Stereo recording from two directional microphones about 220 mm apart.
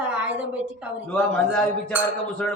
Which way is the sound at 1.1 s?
5° left (ahead or behind).